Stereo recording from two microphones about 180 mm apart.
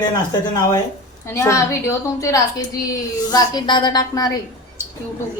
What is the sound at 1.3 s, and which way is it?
A woman's voice, 15° left (ahead or behind).